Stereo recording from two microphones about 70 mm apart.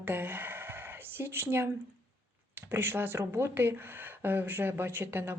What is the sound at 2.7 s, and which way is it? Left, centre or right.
A woman's voice, right.